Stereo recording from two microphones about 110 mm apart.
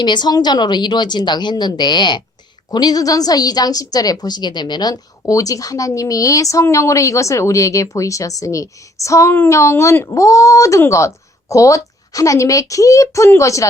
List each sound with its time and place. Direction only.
0.0 s a woman's voice: 45° left (ahead or behind)